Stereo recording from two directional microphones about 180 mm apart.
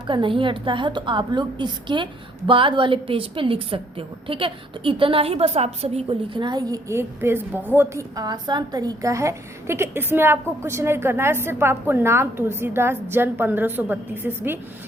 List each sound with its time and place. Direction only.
0.1 s a woman's voice: 25° right (ahead or behind); by 14.6 s 10° right (ahead or behind)